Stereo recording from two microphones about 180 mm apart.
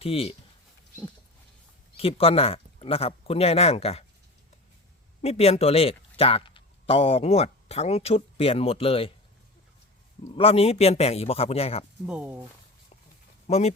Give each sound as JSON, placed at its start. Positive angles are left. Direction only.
{"t": 0.0, "sound": "speech", "side_deg": 35}
{"t": 2.0, "sound": "speech", "side_deg": 30}
{"t": 5.2, "sound": "speech", "side_deg": 35}
{"t": 10.3, "sound": "speech", "side_deg": 30}
{"t": 12.0, "sound": "speech", "side_deg": -5}
{"t": 13.5, "sound": "speech", "side_deg": 35}